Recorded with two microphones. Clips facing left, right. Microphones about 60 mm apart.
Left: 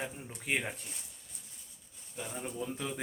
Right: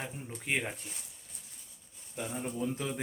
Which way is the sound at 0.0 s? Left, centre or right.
Centre.